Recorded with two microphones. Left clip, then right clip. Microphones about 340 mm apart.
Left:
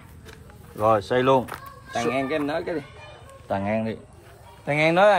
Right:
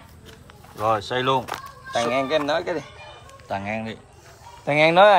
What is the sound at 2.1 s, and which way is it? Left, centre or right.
Speech, centre.